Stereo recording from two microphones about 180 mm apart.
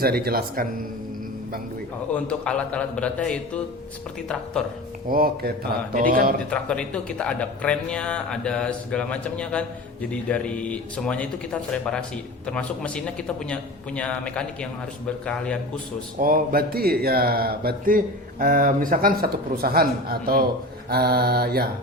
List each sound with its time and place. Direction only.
0.0 s speech: 60° right (ahead or behind)
2.1 s a man's voice: 5° left (ahead or behind)
5.0 s speech: 55° right (ahead or behind)
6.5 s speech: 5° left (ahead or behind)
16.1 s speech: 50° right (ahead or behind)